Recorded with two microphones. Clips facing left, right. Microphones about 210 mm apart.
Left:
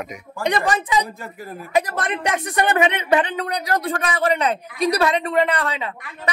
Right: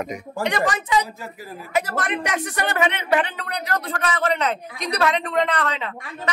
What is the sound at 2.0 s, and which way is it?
Speech, 20° left (ahead or behind).